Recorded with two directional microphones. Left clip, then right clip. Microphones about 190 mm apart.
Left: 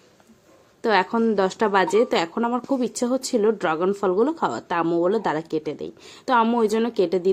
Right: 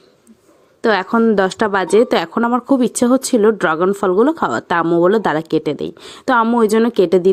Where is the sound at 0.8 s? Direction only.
35° right (ahead or behind).